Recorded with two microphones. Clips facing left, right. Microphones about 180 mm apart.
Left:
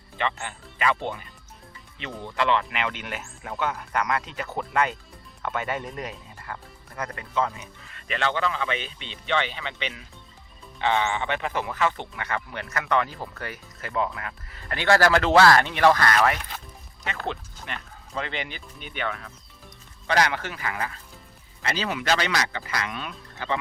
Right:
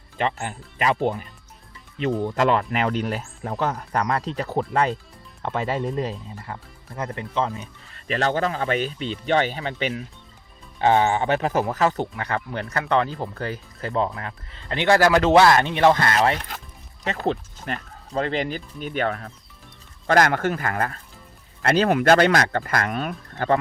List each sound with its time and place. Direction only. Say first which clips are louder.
0.2 s speech: right 4 dB; 40° right (ahead or behind)